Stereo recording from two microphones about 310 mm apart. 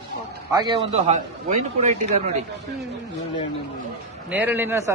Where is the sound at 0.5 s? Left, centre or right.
Right.